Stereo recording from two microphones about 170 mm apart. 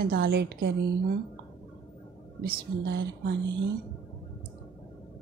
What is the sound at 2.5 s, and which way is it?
Speech, 65° right (ahead or behind).